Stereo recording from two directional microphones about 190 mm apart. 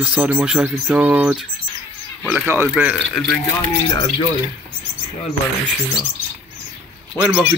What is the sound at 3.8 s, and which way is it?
Speech, 25° left (ahead or behind).